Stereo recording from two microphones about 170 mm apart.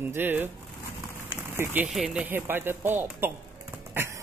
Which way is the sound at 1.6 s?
10° right (ahead or behind).